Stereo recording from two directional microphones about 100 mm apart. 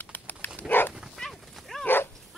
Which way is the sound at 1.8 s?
20° left (ahead or behind).